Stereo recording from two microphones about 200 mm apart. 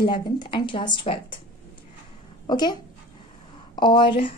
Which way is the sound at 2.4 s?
20° left (ahead or behind).